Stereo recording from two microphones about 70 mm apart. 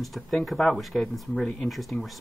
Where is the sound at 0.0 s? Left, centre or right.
Centre.